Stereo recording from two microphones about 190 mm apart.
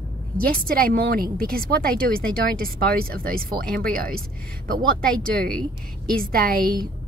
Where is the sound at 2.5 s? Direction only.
50° right (ahead or behind).